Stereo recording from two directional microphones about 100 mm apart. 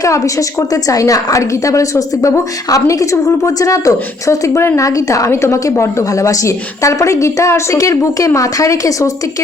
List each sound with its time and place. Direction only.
0.0 s a woman's voice: 35° left (ahead or behind)